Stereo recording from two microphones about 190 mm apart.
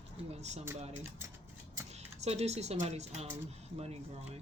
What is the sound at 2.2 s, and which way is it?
Speech, 35° right (ahead or behind).